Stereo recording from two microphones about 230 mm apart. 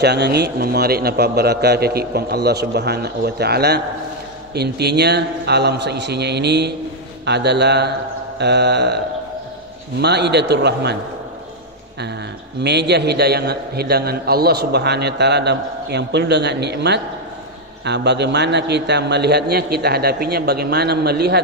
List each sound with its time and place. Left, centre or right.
0.0 s a man's voice: right
10.0 s a man's voice: right
12.6 s a man's voice: right